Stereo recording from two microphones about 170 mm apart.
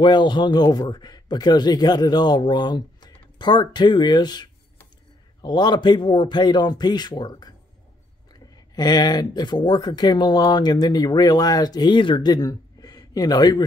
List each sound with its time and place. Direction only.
0.0 s speech: 25° left (ahead or behind)